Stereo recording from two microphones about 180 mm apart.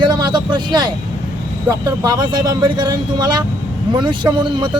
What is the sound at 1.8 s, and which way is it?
Speech, 25° right (ahead or behind).